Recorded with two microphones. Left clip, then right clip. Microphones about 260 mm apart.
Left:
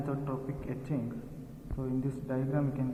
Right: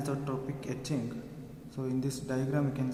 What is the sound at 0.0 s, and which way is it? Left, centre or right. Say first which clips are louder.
A man's voice: right 1 dB; centre.